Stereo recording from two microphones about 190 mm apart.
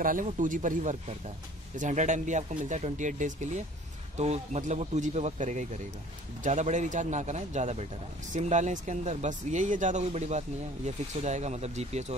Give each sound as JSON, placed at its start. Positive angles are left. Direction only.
{"t": 0.0, "sound": "speech", "side_deg": -45}